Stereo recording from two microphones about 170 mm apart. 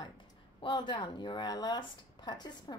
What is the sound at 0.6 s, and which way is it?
Speech, 25° left (ahead or behind).